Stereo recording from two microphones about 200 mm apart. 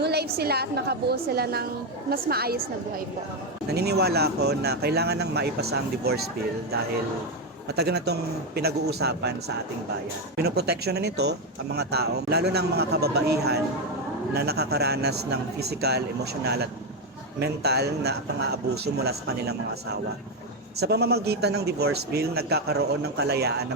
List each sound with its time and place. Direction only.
0.0 s speech: 55° right (ahead or behind)
3.7 s speech: 55° right (ahead or behind)
7.8 s speech: 55° right (ahead or behind)
10.3 s speech: 50° right (ahead or behind)
20.7 s speech: 55° right (ahead or behind)